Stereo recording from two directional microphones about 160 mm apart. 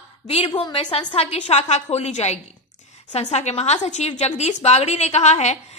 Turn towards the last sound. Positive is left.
turn(degrees=45)  # may be behind; listen again after turning